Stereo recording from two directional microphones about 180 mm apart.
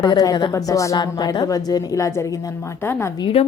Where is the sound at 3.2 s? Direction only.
30° left (ahead or behind).